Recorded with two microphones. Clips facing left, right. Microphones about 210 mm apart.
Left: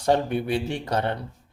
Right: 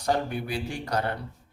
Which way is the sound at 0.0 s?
25° left (ahead or behind).